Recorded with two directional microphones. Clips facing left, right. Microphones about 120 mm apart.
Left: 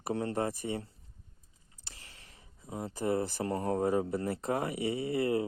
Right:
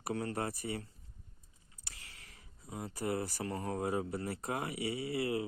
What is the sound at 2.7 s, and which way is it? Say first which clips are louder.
Speech: left 5 dB; 30° left (ahead or behind).